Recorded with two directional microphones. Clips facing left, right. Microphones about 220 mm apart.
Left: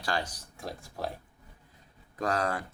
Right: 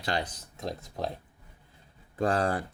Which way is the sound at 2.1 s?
30° right (ahead or behind).